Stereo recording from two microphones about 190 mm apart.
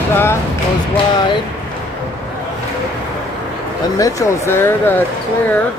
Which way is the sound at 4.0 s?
15° left (ahead or behind).